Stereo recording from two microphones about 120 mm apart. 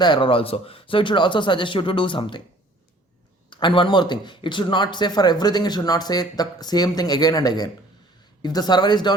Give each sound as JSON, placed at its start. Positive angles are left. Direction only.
{"t": 0.0, "sound": "speech", "side_deg": 40}
{"t": 3.5, "sound": "a man's voice", "side_deg": 45}